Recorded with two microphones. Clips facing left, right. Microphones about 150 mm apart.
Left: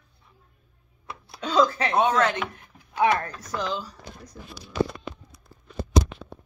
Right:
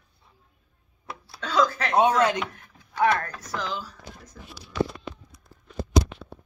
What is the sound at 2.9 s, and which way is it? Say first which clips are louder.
Speech: left 1 dB; 15° left (ahead or behind).